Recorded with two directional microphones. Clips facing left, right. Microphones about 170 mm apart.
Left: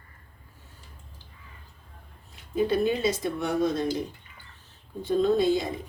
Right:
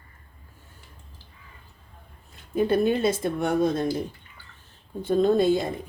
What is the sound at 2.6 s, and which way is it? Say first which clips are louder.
Speech: right 3 dB; 55° right (ahead or behind).